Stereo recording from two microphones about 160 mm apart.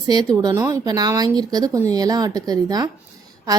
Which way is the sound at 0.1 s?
25° right (ahead or behind).